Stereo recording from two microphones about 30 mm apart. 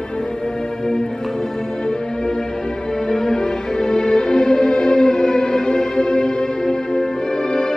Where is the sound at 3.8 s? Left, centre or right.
Left.